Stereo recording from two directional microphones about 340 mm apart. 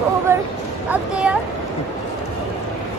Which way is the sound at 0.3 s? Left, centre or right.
Centre.